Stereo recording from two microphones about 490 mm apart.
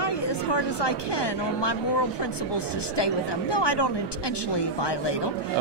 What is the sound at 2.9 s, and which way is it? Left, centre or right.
A woman's voice, left.